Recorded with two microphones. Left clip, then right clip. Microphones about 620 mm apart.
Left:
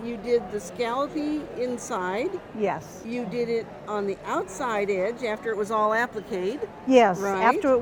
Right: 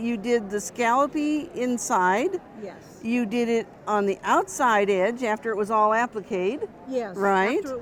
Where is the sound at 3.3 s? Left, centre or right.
Right.